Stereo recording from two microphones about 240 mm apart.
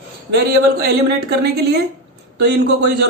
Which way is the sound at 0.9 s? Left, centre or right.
Right.